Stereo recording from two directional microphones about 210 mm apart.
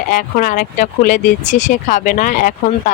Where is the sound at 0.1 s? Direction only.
40° left (ahead or behind).